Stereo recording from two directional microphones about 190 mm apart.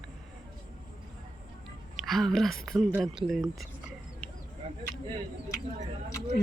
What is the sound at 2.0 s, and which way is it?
Speech, centre (ahead or behind).